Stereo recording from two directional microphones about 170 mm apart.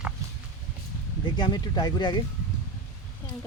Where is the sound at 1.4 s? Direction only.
25° left (ahead or behind).